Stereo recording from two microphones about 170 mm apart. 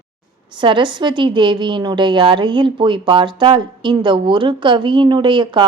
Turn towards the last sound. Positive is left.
turn(degrees=-25)  # may be behind; listen again after turning